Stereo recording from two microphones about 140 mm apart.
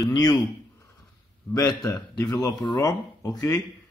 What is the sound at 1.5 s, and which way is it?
A man's voice, 25° left (ahead or behind).